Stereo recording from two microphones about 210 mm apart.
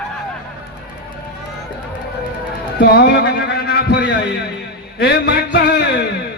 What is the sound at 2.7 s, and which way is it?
A man's voice, 50° left (ahead or behind).